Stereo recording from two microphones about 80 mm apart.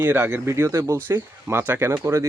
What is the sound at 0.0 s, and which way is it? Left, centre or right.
Speech, right.